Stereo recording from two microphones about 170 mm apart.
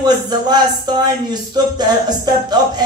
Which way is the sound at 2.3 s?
25° right (ahead or behind).